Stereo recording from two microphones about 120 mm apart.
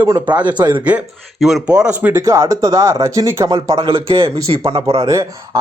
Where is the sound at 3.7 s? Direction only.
45° right (ahead or behind).